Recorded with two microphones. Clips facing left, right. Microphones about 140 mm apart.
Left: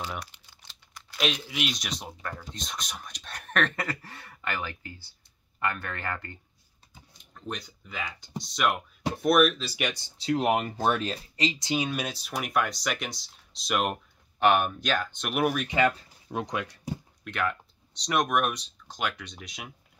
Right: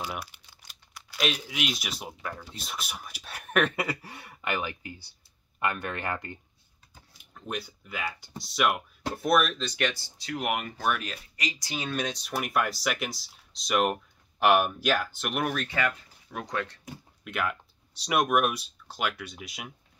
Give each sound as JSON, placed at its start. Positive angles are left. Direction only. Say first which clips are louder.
{"t": 0.0, "sound": "typing", "louder": "even", "side_deg": -10}
{"t": 0.7, "sound": "crumpling", "louder": "even", "side_deg": -5}
{"t": 1.5, "sound": "speech", "louder": "even", "side_deg": 0}
{"t": 7.2, "sound": "speech", "louder": "right 2 dB", "side_deg": -5}
{"t": 15.8, "sound": "speech", "louder": "left 5 dB", "side_deg": 25}
{"t": 16.5, "sound": "speech", "louder": "even", "side_deg": 10}
{"t": 17.2, "sound": "speech", "louder": "even", "side_deg": -5}